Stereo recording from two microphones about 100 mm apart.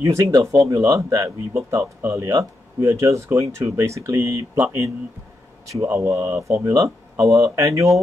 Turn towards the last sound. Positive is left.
turn(degrees=-30)  # may be behind; listen again after turning